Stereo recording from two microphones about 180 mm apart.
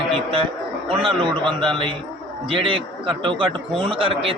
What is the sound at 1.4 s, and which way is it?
A man's voice, 30° right (ahead or behind).